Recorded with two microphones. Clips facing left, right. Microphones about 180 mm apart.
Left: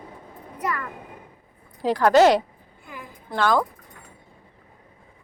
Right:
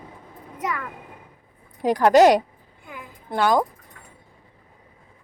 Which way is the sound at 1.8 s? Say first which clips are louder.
Right 2 dB; 15° right (ahead or behind).